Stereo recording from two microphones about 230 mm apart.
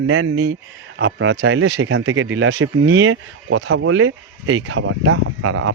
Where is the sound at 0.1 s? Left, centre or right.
Right.